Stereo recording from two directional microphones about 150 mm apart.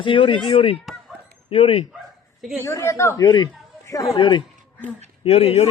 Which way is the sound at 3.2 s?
30° left (ahead or behind).